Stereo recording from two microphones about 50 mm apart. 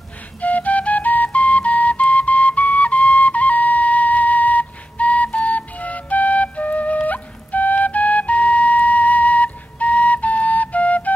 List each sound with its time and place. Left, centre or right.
0.4 s flute: left